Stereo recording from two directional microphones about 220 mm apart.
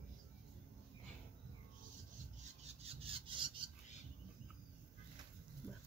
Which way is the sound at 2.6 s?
25° right (ahead or behind).